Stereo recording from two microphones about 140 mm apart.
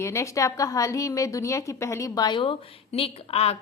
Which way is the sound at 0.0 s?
20° left (ahead or behind).